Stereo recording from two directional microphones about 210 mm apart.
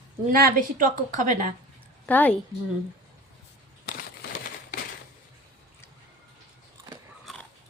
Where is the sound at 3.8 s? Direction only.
45° left (ahead or behind).